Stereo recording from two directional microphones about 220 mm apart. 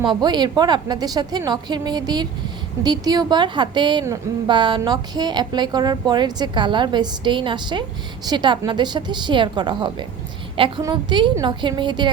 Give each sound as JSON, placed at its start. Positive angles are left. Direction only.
{"t": 0.0, "sound": "a woman's voice", "side_deg": -20}